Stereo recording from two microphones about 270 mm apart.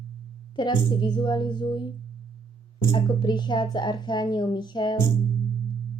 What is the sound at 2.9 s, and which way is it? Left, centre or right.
A woman's voice, centre.